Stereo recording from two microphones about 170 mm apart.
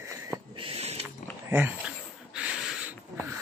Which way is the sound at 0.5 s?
35° right (ahead or behind).